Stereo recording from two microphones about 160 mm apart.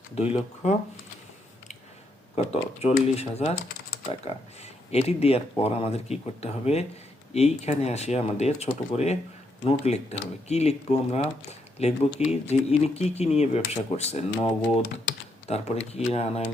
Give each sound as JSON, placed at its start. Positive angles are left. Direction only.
{"t": 0.2, "sound": "speech", "side_deg": 40}
{"t": 2.3, "sound": "speech", "side_deg": 40}
{"t": 4.9, "sound": "speech", "side_deg": 40}
{"t": 15.4, "sound": "speech", "side_deg": 40}